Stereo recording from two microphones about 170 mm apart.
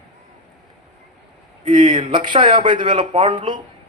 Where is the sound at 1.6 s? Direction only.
25° right (ahead or behind).